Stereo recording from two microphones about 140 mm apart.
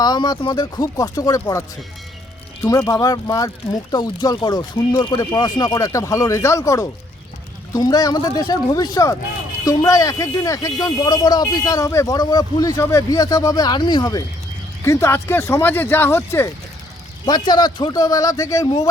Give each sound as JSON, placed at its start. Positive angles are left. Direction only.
{"t": 0.0, "sound": "speech", "side_deg": 30}
{"t": 2.6, "sound": "speech", "side_deg": 25}
{"t": 17.2, "sound": "speech", "side_deg": 30}